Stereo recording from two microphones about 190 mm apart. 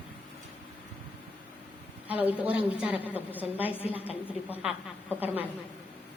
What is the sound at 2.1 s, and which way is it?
A woman's voice, 10° right (ahead or behind).